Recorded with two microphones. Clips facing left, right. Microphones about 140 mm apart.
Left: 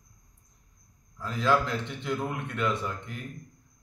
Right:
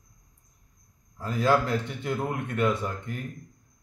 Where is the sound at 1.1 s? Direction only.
45° right (ahead or behind).